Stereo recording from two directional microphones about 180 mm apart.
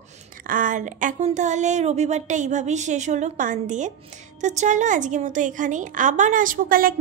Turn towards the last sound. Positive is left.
turn(degrees=-50)  # may be behind; listen again after turning